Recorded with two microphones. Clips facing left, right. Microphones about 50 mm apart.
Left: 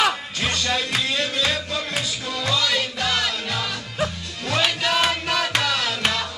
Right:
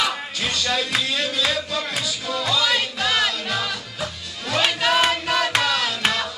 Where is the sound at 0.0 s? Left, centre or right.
Left.